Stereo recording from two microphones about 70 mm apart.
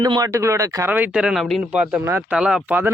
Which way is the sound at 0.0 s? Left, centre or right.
Right.